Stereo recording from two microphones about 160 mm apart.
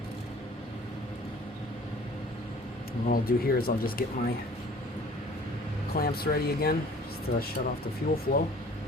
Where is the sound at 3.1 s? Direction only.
70° left (ahead or behind).